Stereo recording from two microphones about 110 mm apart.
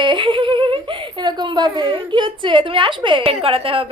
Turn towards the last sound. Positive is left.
turn(degrees=-55)  # may be behind; listen again after turning